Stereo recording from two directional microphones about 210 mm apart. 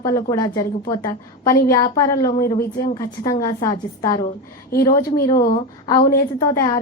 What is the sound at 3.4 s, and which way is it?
Speech, 15° left (ahead or behind).